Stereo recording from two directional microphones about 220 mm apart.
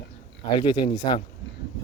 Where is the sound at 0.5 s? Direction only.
20° left (ahead or behind).